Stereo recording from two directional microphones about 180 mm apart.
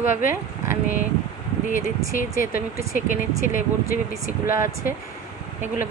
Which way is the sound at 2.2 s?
50° left (ahead or behind).